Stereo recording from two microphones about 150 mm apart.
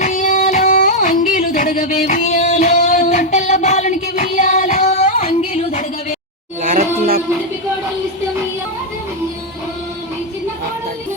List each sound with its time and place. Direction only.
0.0 s music: 55° left (ahead or behind)